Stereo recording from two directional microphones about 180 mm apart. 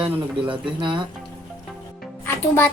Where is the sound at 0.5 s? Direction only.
25° right (ahead or behind).